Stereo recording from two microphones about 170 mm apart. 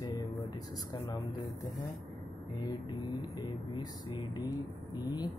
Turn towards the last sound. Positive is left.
turn(degrees=25)  # may be behind; listen again after turning